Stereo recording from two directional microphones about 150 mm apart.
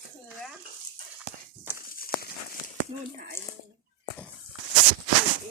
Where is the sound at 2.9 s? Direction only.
40° right (ahead or behind).